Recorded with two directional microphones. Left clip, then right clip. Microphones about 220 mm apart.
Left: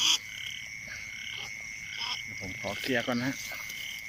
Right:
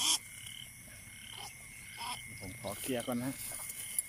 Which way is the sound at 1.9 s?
15° right (ahead or behind).